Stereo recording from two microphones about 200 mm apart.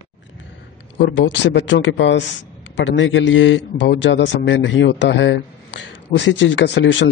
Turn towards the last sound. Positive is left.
turn(degrees=65)  # may be behind; listen again after turning